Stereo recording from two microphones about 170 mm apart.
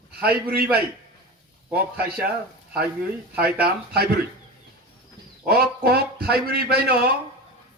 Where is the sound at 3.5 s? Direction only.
65° right (ahead or behind).